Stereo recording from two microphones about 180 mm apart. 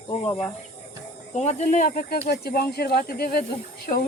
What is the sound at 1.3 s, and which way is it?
Speech, 40° left (ahead or behind).